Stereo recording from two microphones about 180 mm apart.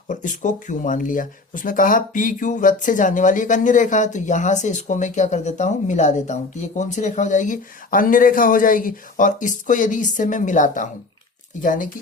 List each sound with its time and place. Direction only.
0.1 s speech: 45° left (ahead or behind)